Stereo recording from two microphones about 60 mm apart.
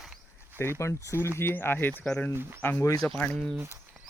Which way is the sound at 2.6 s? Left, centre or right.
Left.